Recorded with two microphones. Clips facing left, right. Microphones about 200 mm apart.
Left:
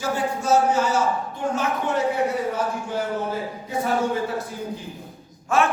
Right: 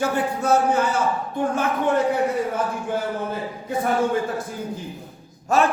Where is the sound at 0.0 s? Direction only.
60° right (ahead or behind).